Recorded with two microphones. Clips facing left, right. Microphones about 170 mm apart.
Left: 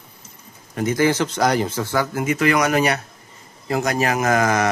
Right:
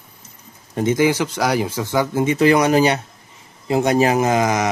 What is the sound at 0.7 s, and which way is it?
Speech, 25° right (ahead or behind).